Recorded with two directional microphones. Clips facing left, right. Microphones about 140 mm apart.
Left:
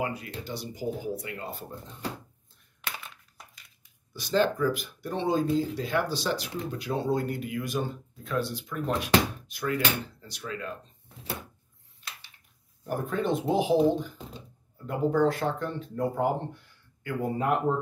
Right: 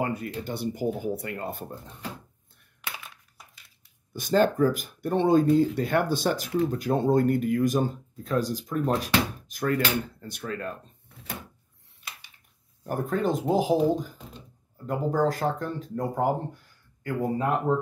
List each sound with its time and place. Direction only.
0.0 s speech: 50° right (ahead or behind)
4.1 s speech: 50° right (ahead or behind)
12.8 s speech: 45° right (ahead or behind)